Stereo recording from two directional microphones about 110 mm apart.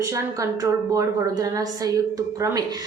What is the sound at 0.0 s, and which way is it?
A woman's voice, 30° right (ahead or behind).